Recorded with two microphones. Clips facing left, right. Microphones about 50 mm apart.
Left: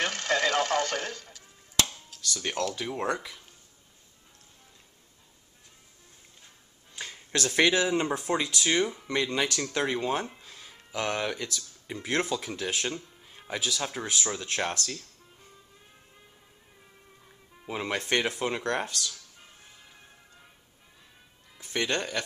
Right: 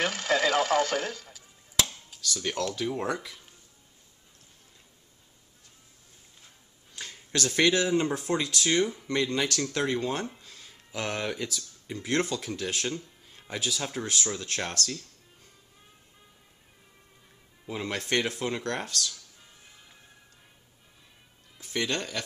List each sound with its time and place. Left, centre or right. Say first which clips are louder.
0.0 s a sound: right 1 dB; centre
2.4 s speech: right 1 dB; centre
7.0 s a sound: even; centre
7.9 s speech: right 1 dB; centre
10.9 s speech: left 2 dB; centre
11.9 s speech: even; centre
13.6 s speech: even; centre
17.6 s speech: left 1 dB; centre
21.8 s speech: left 3 dB; centre